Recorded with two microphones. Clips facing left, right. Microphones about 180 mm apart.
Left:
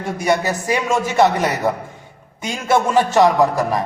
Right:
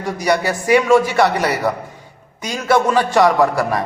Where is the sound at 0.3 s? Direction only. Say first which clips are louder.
Right 3 dB; 20° left (ahead or behind).